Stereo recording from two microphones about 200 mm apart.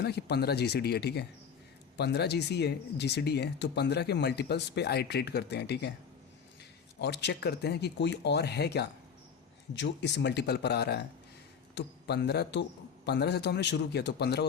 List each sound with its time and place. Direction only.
0.0 s speech: 55° left (ahead or behind)
7.0 s a man's voice: 60° left (ahead or behind)